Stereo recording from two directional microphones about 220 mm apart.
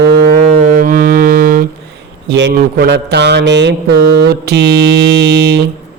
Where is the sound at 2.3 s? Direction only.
50° right (ahead or behind).